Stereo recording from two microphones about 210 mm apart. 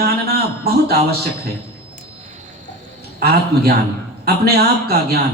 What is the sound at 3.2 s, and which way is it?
A man's voice, 45° right (ahead or behind).